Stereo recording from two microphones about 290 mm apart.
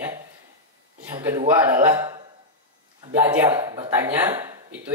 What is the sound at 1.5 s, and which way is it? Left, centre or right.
Speech, centre.